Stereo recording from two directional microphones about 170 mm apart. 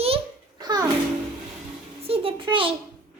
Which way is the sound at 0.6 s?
25° right (ahead or behind).